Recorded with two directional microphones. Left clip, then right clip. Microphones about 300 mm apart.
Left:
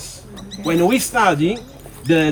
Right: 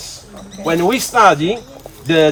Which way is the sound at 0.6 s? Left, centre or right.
Centre.